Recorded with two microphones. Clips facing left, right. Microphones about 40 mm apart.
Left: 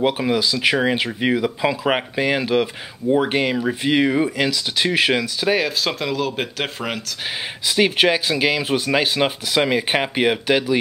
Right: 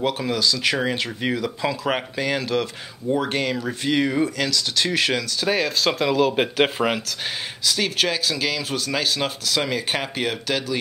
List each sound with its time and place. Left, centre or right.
0.0 s speech: centre
7.6 s speech: left